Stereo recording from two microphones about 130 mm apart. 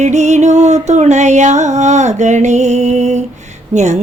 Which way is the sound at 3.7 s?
65° right (ahead or behind).